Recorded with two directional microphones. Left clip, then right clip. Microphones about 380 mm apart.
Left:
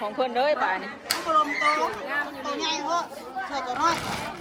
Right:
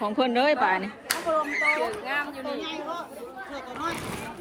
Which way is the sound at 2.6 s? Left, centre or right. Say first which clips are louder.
Left 6 dB; centre.